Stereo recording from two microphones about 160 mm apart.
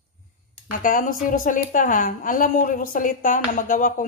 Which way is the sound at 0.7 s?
55° left (ahead or behind).